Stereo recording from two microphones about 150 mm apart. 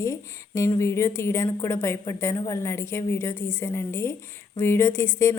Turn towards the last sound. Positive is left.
turn(degrees=15)  # may be behind; listen again after turning